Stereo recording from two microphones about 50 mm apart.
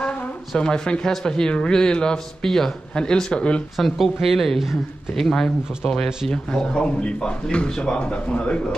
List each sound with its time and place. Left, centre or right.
0.6 s a man's voice: centre
3.7 s speech: centre
5.2 s a man's voice: centre
6.7 s speech: left